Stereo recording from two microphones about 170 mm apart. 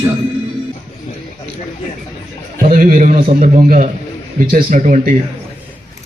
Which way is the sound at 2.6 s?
55° right (ahead or behind).